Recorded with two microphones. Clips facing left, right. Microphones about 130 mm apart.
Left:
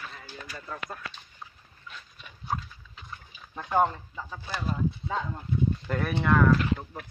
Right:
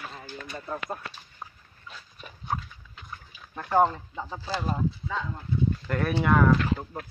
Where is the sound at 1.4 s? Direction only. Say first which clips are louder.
Right 4 dB; 50° right (ahead or behind).